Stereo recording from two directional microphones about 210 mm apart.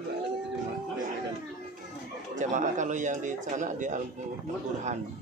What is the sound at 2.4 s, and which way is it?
Speech, 35° right (ahead or behind).